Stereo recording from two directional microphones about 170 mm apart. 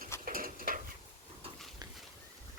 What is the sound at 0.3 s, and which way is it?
Stir, 55° right (ahead or behind).